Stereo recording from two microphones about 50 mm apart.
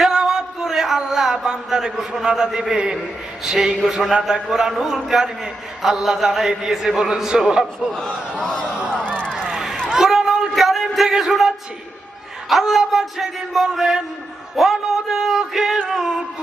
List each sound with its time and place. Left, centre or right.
0.0 s music: centre
1.5 s a man's voice: centre
8.4 s speech: centre
8.9 s a sound: centre
9.9 s music: centre
12.5 s a man's voice: centre